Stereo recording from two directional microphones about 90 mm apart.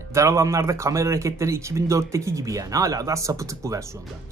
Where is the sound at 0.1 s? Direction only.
35° right (ahead or behind).